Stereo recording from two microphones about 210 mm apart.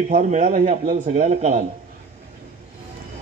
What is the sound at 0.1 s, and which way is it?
A man's voice, 35° right (ahead or behind).